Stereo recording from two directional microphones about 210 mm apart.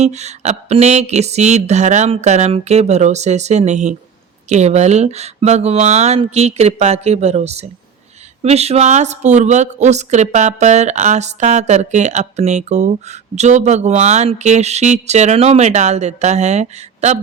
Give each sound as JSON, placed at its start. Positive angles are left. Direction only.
{"t": 0.0, "sound": "a woman's voice", "side_deg": -30}